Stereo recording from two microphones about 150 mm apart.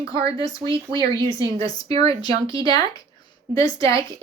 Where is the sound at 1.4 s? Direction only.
25° left (ahead or behind).